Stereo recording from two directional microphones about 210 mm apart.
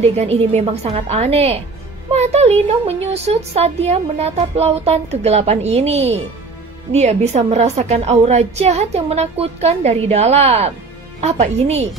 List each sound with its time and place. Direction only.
0.2 s a woman's voice: 30° right (ahead or behind)